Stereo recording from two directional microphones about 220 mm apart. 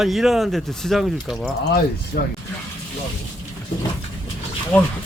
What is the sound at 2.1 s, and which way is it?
Speech, 45° left (ahead or behind).